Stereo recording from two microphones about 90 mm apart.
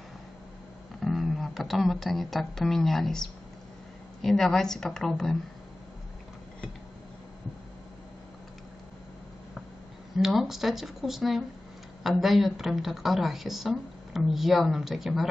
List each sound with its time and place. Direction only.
0.9 s a woman's voice: centre (ahead or behind)
10.1 s a woman's voice: 5° right (ahead or behind)